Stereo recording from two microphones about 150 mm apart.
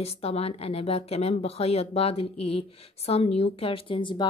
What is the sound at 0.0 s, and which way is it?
A woman's voice, 45° left (ahead or behind).